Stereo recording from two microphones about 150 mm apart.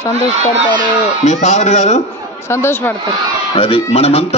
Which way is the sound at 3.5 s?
40° left (ahead or behind).